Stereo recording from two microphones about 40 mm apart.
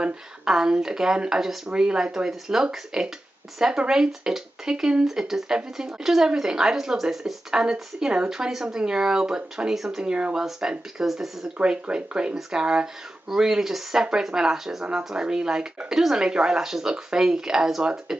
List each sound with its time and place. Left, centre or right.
0.5 s speech: centre
10.0 s speech: right
11.6 s speech: right